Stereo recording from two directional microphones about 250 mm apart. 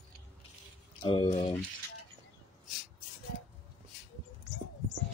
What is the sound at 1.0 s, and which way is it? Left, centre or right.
Speech, left.